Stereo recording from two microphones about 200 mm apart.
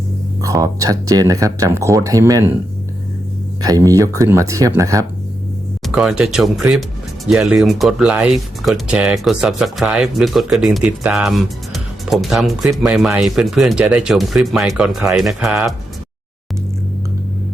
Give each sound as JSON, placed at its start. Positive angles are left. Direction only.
{"t": 0.4, "sound": "speech", "side_deg": -15}
{"t": 3.6, "sound": "speech", "side_deg": -15}
{"t": 5.8, "sound": "speech", "side_deg": 0}